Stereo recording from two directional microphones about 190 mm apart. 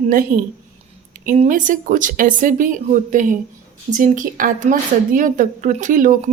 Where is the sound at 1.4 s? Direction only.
40° right (ahead or behind).